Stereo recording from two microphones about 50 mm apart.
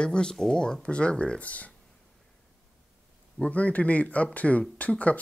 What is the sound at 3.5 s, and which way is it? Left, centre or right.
Speech, left.